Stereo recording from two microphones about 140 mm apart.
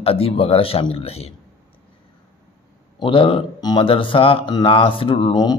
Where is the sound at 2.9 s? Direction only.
40° left (ahead or behind).